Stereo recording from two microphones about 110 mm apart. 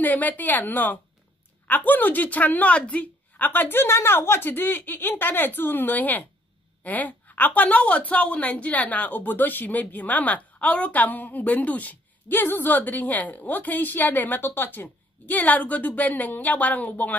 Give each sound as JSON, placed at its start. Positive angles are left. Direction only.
{"t": 0.0, "sound": "a woman's voice", "side_deg": 15}